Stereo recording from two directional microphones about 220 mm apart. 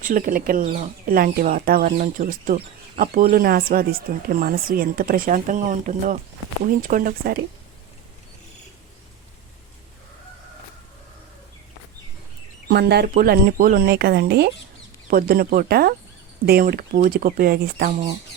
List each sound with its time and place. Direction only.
0.0 s speech: 40° right (ahead or behind)
12.6 s speech: 45° right (ahead or behind)